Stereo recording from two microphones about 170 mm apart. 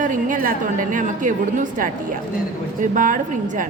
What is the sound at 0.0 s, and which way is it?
A woman's voice, 50° right (ahead or behind).